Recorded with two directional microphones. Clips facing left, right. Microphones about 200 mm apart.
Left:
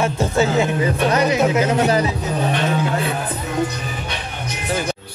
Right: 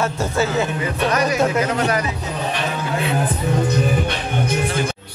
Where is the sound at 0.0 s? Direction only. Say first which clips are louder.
Left 2 dB; 15° left (ahead or behind).